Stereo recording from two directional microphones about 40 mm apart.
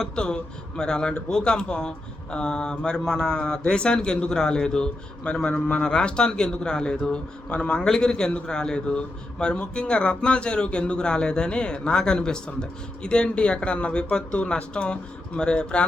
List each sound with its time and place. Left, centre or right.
0.0 s speech: left